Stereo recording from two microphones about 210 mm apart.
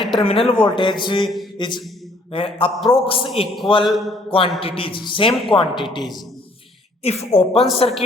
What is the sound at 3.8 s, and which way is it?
Speech, centre (ahead or behind).